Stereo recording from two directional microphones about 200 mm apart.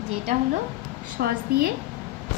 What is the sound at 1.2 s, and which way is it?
Speech, 45° right (ahead or behind).